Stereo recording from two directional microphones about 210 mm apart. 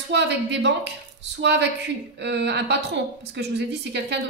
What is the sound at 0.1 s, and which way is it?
A woman's voice, 55° right (ahead or behind).